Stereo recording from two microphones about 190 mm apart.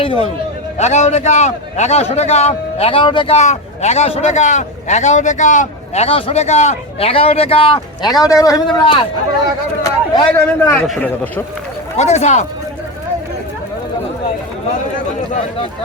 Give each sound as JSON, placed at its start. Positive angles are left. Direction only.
{"t": 0.0, "sound": "a man's voice", "side_deg": 30}
{"t": 9.8, "sound": "speech", "side_deg": 15}
{"t": 11.9, "sound": "a man's voice", "side_deg": 35}